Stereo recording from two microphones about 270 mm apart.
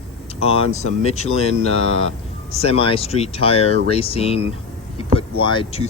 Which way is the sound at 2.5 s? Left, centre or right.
Left.